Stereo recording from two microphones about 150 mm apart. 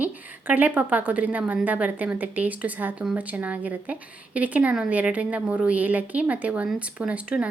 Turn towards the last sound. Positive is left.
turn(degrees=-10)  # may be behind; listen again after turning